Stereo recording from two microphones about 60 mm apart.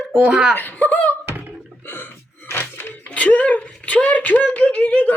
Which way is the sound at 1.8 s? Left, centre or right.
Left.